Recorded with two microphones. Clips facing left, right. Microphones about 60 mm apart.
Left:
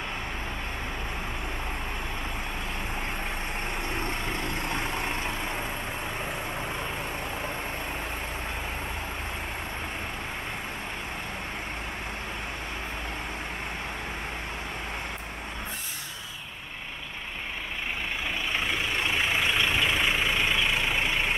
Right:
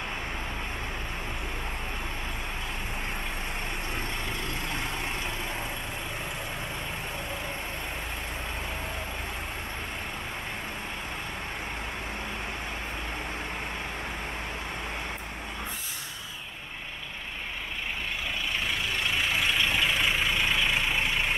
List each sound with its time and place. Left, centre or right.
19.0 s vehicle: centre